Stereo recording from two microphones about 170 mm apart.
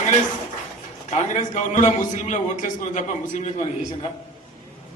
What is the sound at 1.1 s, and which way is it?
A man's voice, 45° left (ahead or behind).